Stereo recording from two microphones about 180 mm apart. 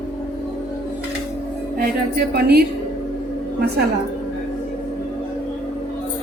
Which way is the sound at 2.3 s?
65° right (ahead or behind).